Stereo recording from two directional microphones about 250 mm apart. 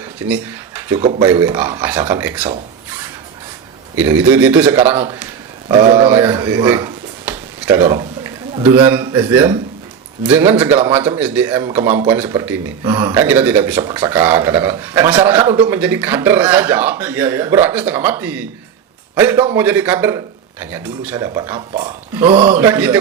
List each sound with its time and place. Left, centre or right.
0.3 s speech: centre
3.9 s speech: centre
5.6 s a sound: centre
7.7 s a man's voice: centre
22.5 s speech: centre